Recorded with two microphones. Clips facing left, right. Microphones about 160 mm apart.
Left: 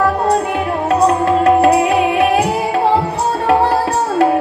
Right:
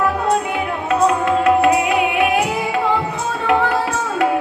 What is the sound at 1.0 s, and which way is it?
Music, 35° left (ahead or behind).